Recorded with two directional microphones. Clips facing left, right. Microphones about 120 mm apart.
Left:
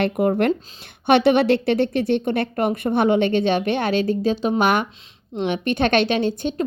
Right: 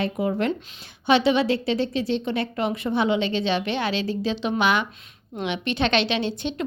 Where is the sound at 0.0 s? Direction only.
60° left (ahead or behind).